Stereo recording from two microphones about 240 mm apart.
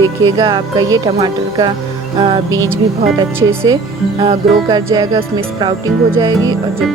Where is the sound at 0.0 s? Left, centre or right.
Centre.